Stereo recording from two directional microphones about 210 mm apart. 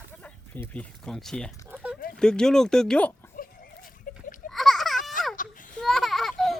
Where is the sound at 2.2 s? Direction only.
5° left (ahead or behind).